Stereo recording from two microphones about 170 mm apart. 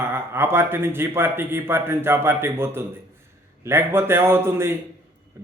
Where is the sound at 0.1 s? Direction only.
15° right (ahead or behind).